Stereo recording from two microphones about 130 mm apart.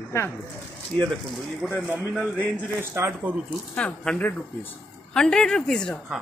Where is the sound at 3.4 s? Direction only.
10° left (ahead or behind).